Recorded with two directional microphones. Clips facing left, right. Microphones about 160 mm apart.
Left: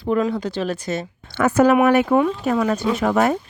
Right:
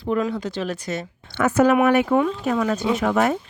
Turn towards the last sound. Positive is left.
turn(degrees=35)  # may be behind; listen again after turning